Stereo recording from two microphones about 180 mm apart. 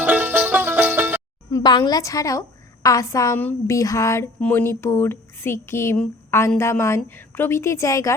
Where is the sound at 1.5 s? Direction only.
20° left (ahead or behind).